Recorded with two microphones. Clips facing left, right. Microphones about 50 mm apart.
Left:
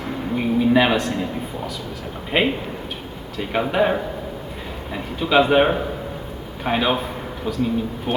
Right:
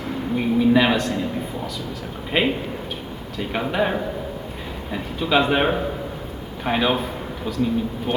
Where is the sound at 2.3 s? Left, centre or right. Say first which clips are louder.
Left 1 dB; centre.